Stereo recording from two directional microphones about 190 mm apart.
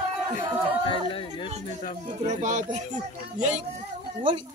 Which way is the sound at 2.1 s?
40° right (ahead or behind).